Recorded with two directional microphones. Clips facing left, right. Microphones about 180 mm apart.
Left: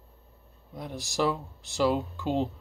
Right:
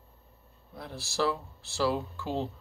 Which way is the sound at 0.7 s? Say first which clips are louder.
Left 4 dB; 15° left (ahead or behind).